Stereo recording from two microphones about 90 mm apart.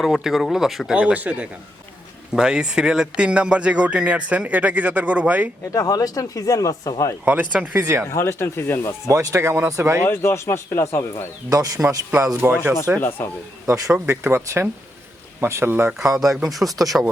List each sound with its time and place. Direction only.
0.0 s speech: centre (ahead or behind)
0.9 s speech: 15° right (ahead or behind)
5.7 s speech: 40° left (ahead or behind)
7.3 s speech: 20° right (ahead or behind)
8.1 s speech: 30° left (ahead or behind)
9.0 s speech: 35° right (ahead or behind)
10.1 s speech: 30° left (ahead or behind)
11.4 s speech: 40° right (ahead or behind)
12.4 s speech: 20° right (ahead or behind)
13.0 s speech: 25° left (ahead or behind)
14.1 s speech: 25° right (ahead or behind)
16.0 s speech: 5° right (ahead or behind)